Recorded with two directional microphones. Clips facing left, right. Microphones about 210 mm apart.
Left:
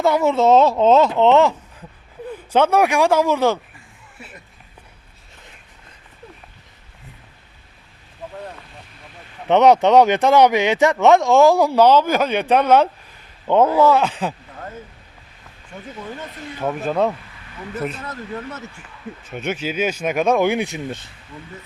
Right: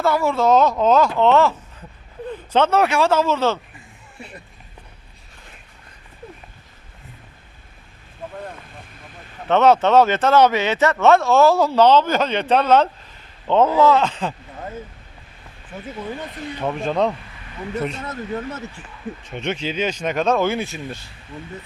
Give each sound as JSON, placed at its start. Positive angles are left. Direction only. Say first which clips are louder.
{"t": 0.0, "sound": "speech", "louder": "left 2 dB", "side_deg": 20}
{"t": 9.5, "sound": "speech", "louder": "left 2 dB", "side_deg": 15}
{"t": 15.7, "sound": "speech", "louder": "right 3 dB", "side_deg": -5}
{"t": 18.0, "sound": "speech", "louder": "right 3 dB", "side_deg": -25}
{"t": 19.2, "sound": "speech", "louder": "left 1 dB", "side_deg": 5}